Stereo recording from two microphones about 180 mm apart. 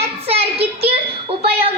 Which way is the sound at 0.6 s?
35° right (ahead or behind).